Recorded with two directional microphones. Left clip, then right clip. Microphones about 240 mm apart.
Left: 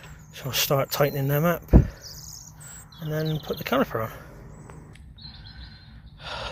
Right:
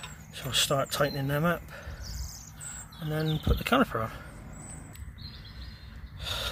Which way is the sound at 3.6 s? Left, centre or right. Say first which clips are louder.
Left 1 dB; centre.